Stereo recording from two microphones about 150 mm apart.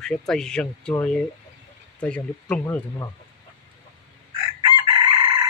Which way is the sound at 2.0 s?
5° left (ahead or behind).